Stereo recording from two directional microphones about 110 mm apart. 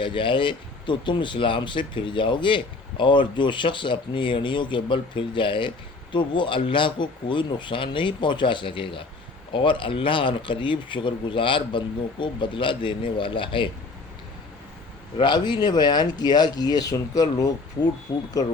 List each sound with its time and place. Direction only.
0.0 s speech: 50° left (ahead or behind)
15.2 s speech: 40° left (ahead or behind)